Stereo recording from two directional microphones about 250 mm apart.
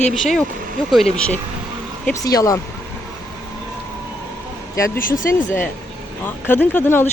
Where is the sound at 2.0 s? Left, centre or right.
Centre.